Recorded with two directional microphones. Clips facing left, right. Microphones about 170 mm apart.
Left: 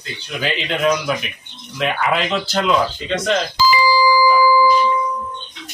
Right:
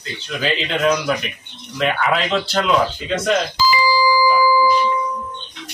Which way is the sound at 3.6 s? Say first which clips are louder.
Left 2 dB; 60° left (ahead or behind).